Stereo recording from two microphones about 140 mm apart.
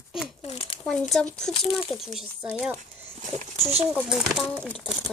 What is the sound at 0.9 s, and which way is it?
Speech, 5° left (ahead or behind).